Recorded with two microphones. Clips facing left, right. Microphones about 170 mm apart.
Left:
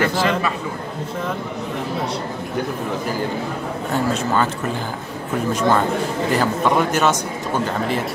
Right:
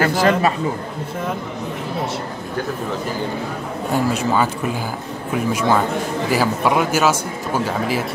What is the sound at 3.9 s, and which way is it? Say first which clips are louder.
A man's voice: right 2 dB; 10° right (ahead or behind).